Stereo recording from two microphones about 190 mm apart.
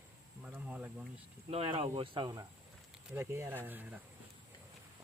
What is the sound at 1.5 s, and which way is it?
Speech, 30° right (ahead or behind).